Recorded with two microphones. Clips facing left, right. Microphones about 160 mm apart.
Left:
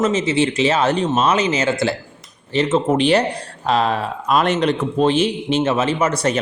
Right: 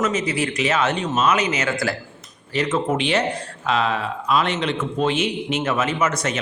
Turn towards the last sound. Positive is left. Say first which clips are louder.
# left 4 dB
turn(degrees=30)  # may be behind; listen again after turning